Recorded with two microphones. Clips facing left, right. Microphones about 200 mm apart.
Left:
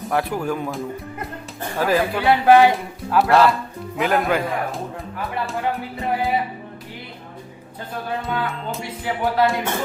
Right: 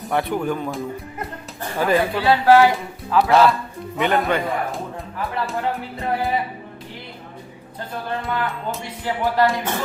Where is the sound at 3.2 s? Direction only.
Centre (ahead or behind).